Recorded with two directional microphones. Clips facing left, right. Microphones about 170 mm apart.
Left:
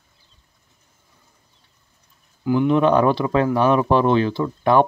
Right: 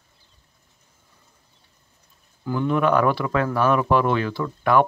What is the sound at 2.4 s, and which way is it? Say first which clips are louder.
Speech: left 5 dB; 15° left (ahead or behind).